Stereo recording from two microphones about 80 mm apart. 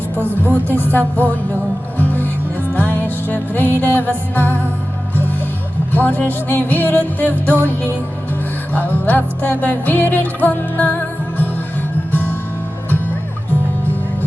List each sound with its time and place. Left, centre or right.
0.3 s speech: right
0.7 s music: left
5.9 s music: left
12.1 s music: left